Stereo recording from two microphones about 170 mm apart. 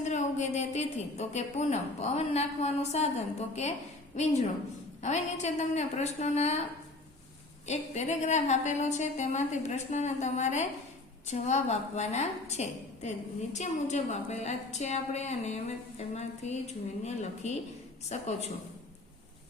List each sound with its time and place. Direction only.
0.0 s a woman's voice: 45° left (ahead or behind)
4.2 s a woman's voice: 40° left (ahead or behind)
7.7 s a woman's voice: 40° left (ahead or behind)